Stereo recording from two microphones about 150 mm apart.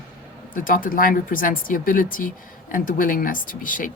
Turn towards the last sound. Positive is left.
turn(degrees=65)  # may be behind; listen again after turning